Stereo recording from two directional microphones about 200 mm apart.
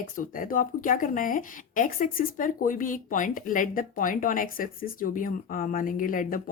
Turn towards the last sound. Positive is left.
turn(degrees=40)  # may be behind; listen again after turning